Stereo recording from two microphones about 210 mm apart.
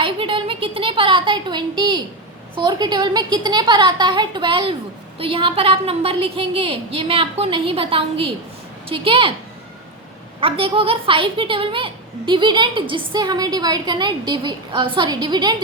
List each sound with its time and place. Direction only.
0.0 s a sound: 25° right (ahead or behind)
2.6 s a woman's voice: 20° right (ahead or behind)
10.4 s a woman's voice: 25° right (ahead or behind)